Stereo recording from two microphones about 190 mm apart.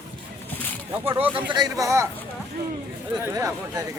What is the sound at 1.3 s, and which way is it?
Speech, 20° right (ahead or behind).